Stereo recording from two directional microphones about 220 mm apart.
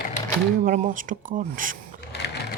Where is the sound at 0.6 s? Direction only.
40° right (ahead or behind).